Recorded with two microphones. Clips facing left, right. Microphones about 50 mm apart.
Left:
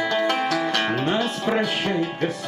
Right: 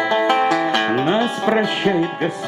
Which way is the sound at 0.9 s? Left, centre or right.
Centre.